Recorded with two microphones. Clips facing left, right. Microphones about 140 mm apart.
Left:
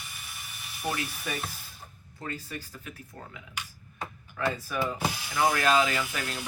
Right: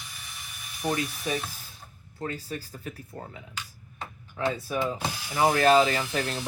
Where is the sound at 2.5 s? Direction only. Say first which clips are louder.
Right 4 dB; 35° right (ahead or behind).